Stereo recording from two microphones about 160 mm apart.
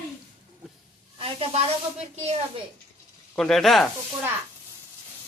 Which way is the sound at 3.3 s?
Centre (ahead or behind).